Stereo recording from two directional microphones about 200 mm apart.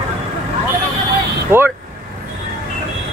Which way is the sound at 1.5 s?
10° right (ahead or behind).